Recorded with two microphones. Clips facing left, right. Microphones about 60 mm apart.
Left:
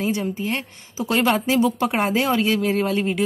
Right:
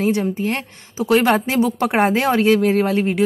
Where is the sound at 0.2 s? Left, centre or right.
Right.